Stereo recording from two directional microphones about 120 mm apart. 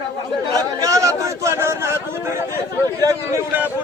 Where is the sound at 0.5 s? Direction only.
30° right (ahead or behind).